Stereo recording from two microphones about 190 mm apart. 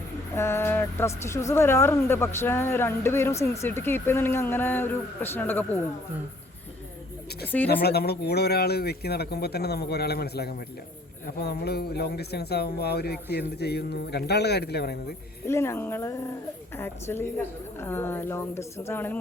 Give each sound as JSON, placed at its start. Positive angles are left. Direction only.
{"t": 0.3, "sound": "a woman's voice", "side_deg": 15}
{"t": 7.4, "sound": "a woman's voice", "side_deg": 10}
{"t": 7.7, "sound": "speech", "side_deg": 55}
{"t": 15.4, "sound": "a woman's voice", "side_deg": 15}